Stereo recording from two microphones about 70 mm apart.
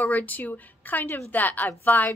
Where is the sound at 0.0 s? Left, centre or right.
Left.